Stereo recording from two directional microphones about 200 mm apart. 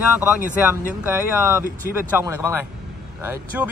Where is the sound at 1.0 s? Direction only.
10° right (ahead or behind).